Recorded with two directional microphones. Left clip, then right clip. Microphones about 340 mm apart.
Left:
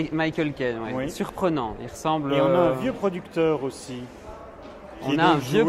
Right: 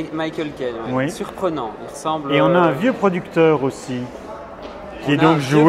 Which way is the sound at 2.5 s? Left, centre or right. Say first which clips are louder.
Right 5 dB; centre.